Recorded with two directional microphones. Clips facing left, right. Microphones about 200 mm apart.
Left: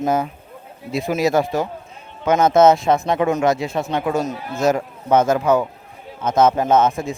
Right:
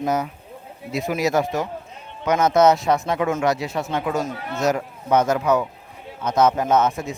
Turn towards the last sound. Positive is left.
turn(degrees=30)  # may be behind; listen again after turning